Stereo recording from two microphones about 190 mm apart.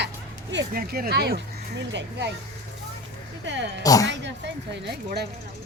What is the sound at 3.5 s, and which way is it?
Speech, 70° right (ahead or behind).